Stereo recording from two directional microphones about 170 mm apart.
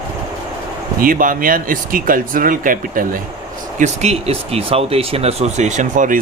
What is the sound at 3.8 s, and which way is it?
Speech, 40° right (ahead or behind).